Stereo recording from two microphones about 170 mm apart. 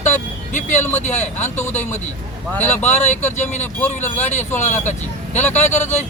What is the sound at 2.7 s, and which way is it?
Speech, 45° left (ahead or behind).